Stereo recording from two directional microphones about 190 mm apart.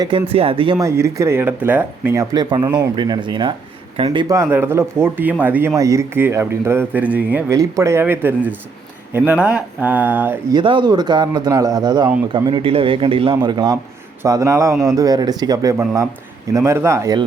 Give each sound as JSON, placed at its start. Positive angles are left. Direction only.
{"t": 0.0, "sound": "a man's voice", "side_deg": -30}
{"t": 0.8, "sound": "a man's voice", "side_deg": -15}
{"t": 10.5, "sound": "a man's voice", "side_deg": -25}